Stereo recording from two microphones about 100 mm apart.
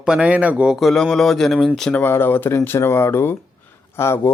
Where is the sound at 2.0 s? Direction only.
20° left (ahead or behind).